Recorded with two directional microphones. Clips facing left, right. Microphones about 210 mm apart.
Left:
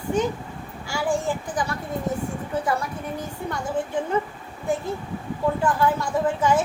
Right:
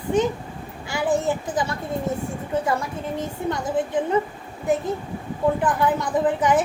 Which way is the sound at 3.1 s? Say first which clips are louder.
Right 4 dB; 20° right (ahead or behind).